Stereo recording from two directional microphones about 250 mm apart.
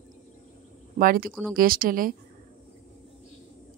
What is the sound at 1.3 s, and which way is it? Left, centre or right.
Speech, centre.